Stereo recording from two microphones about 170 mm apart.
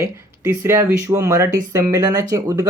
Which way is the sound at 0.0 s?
15° right (ahead or behind).